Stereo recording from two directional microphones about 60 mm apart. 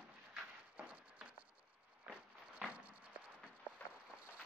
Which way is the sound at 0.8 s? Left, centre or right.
Right.